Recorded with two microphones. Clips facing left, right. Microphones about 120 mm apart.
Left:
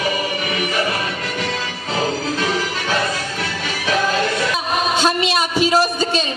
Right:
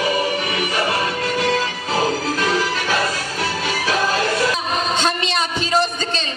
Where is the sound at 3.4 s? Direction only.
35° right (ahead or behind).